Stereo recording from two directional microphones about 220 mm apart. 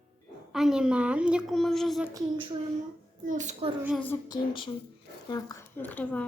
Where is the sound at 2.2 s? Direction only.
20° right (ahead or behind).